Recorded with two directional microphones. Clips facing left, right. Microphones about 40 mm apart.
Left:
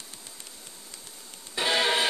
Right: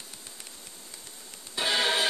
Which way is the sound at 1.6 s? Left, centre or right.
Centre.